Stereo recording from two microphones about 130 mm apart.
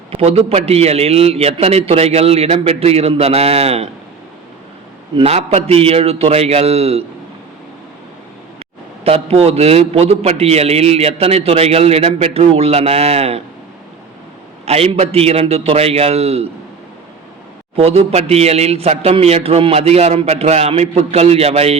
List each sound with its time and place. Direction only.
0.1 s a man's voice: 50° right (ahead or behind)
5.1 s a man's voice: 50° right (ahead or behind)
9.0 s a man's voice: 50° right (ahead or behind)
14.6 s a man's voice: 55° right (ahead or behind)
17.7 s a man's voice: 50° right (ahead or behind)